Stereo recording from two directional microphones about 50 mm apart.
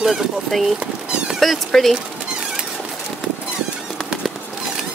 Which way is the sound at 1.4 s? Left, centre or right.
Centre.